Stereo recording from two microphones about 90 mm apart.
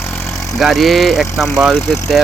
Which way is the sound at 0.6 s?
Centre (ahead or behind).